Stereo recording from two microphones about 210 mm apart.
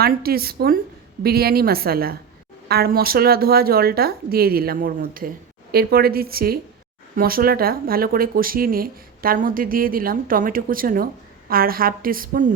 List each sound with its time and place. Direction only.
0.0 s speech: 45° right (ahead or behind)